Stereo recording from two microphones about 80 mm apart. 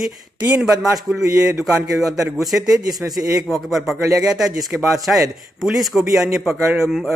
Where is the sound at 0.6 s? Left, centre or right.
Centre.